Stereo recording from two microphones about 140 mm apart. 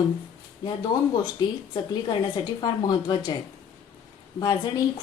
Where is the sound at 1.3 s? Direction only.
30° left (ahead or behind).